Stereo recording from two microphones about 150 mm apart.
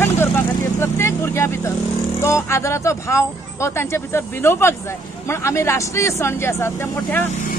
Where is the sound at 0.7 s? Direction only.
15° left (ahead or behind).